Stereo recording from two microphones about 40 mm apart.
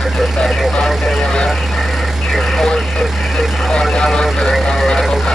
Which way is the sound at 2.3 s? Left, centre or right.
Centre.